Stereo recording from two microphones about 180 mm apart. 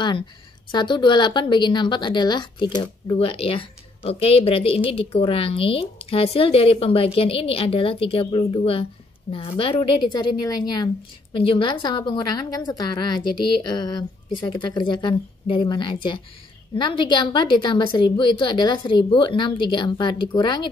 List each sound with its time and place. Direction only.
0.7 s a woman's voice: 25° left (ahead or behind)